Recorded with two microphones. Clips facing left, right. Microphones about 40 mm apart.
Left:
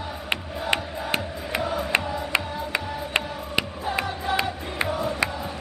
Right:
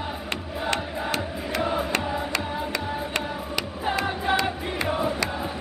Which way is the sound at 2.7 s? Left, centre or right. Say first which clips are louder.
Left 1 dB; left.